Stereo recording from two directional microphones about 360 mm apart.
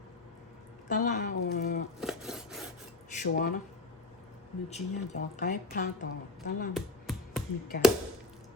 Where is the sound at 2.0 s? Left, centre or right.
Centre.